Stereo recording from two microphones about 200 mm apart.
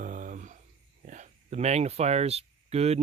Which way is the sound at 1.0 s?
35° right (ahead or behind).